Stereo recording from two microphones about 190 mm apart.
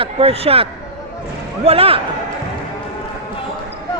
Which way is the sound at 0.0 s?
30° right (ahead or behind).